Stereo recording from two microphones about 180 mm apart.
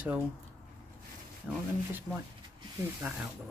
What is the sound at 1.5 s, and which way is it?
Speech, 5° right (ahead or behind).